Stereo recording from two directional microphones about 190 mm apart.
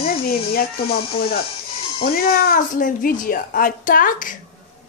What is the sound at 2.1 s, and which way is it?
A woman's voice, 50° left (ahead or behind).